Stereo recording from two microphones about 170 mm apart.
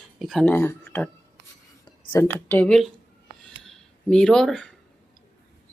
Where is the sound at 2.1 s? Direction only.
15° left (ahead or behind).